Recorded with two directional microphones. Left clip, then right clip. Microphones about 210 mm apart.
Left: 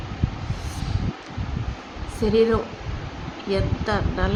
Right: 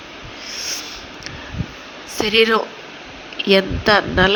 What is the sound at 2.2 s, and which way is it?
Speech, 25° right (ahead or behind).